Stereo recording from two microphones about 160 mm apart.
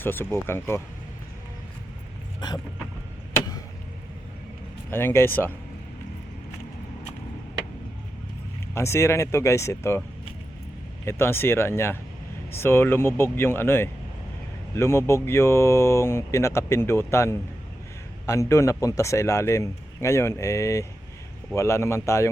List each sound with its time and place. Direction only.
0.0 s speech: 15° left (ahead or behind)
2.4 s speech: 25° left (ahead or behind)
3.3 s chop: 25° left (ahead or behind)
4.9 s speech: 15° left (ahead or behind)
8.7 s speech: 15° left (ahead or behind)
11.0 s speech: 15° left (ahead or behind)